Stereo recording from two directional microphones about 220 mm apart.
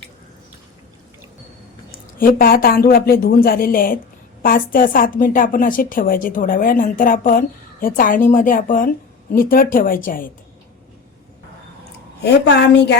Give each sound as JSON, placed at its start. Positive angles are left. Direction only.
{"t": 1.9, "sound": "a woman's voice", "side_deg": 40}
{"t": 12.2, "sound": "a woman's voice", "side_deg": 50}